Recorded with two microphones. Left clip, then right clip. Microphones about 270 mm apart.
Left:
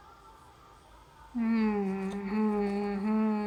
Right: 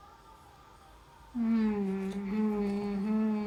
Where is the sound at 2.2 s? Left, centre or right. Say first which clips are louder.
Left 4 dB; left.